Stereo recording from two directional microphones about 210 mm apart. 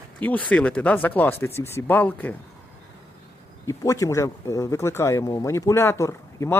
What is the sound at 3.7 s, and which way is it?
Speech, 15° left (ahead or behind).